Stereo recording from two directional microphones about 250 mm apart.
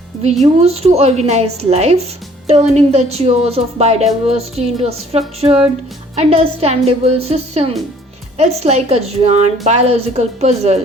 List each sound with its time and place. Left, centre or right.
0.6 s a woman's voice: right